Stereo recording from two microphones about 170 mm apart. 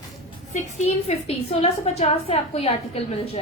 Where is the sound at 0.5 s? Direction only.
40° left (ahead or behind).